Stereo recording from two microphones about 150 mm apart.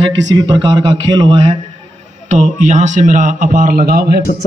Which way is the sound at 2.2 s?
55° right (ahead or behind).